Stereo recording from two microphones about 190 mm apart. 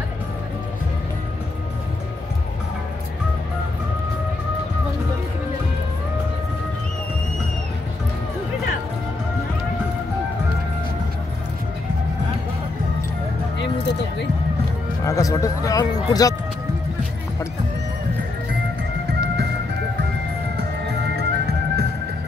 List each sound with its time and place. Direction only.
15.0 s speech: 15° left (ahead or behind)
21.2 s music: 60° right (ahead or behind)